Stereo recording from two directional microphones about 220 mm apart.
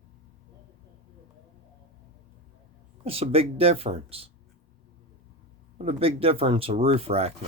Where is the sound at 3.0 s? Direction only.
25° right (ahead or behind).